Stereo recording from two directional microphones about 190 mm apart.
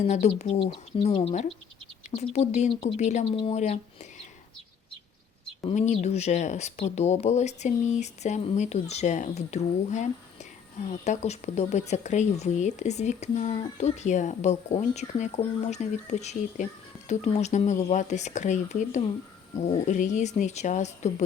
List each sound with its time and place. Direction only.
0.0 s speech: 35° left (ahead or behind)
5.6 s speech: 35° left (ahead or behind)